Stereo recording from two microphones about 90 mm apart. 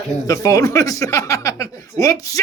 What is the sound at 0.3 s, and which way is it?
Speech, 40° left (ahead or behind).